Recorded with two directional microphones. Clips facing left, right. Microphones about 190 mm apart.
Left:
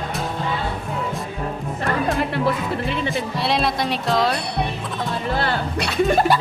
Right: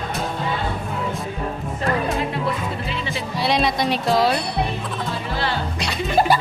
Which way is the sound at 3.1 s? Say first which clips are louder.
Even; centre (ahead or behind).